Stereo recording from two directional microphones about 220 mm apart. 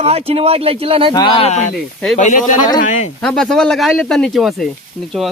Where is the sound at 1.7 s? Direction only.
Centre (ahead or behind).